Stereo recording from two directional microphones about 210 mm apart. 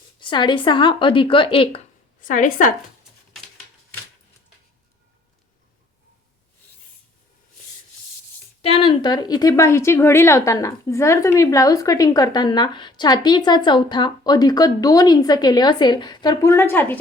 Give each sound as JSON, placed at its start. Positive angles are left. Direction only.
{"t": 0.2, "sound": "speech", "side_deg": 20}
{"t": 8.6, "sound": "a woman's voice", "side_deg": 25}